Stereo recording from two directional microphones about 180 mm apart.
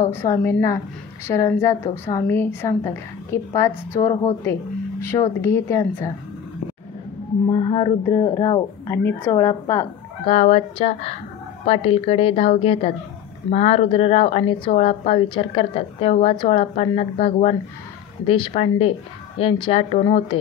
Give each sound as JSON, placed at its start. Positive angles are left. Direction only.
{"t": 0.1, "sound": "speech", "side_deg": 15}
{"t": 7.4, "sound": "speech", "side_deg": 20}
{"t": 10.2, "sound": "speech", "side_deg": 35}